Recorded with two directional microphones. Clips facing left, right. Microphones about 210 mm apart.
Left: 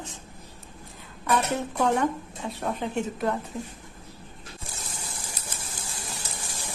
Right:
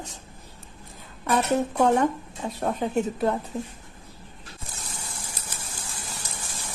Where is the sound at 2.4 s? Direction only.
40° right (ahead or behind).